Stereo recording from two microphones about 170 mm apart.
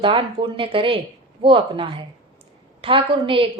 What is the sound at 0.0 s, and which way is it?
A woman's voice, 30° right (ahead or behind).